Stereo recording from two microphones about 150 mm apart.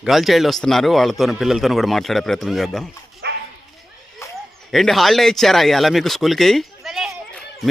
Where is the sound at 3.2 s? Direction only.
90° right.